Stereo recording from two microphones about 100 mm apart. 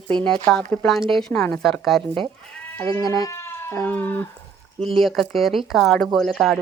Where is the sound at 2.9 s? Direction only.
35° left (ahead or behind); by 4.2 s 15° left (ahead or behind).